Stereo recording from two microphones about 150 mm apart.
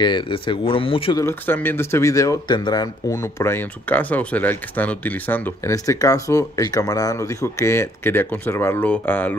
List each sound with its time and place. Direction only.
0.0 s speech: 30° left (ahead or behind)
1.1 s speech: 15° left (ahead or behind)